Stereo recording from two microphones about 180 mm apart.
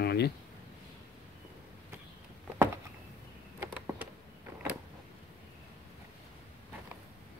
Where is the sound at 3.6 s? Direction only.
10° right (ahead or behind).